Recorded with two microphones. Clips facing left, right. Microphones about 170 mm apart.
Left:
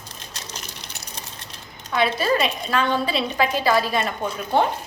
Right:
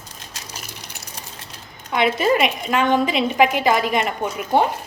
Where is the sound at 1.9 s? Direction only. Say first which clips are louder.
Right 3 dB; 20° right (ahead or behind).